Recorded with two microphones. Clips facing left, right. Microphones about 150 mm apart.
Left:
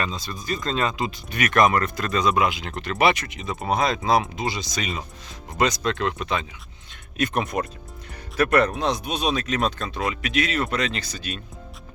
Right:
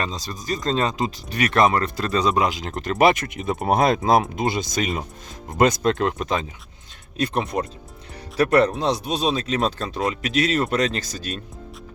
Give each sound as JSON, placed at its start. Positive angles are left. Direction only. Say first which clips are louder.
{"t": 0.0, "sound": "speech", "louder": "right 1 dB", "side_deg": -35}
{"t": 7.2, "sound": "speech", "louder": "right 1 dB", "side_deg": -30}